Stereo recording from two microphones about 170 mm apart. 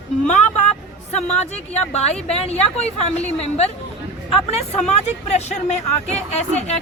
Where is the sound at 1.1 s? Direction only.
40° left (ahead or behind).